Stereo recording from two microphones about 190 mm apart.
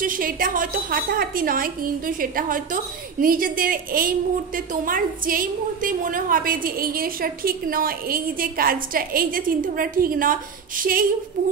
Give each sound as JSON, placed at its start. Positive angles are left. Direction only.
{"t": 0.0, "sound": "a woman's voice", "side_deg": -45}